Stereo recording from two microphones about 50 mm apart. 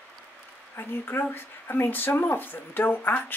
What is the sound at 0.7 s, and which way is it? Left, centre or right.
Speech, left.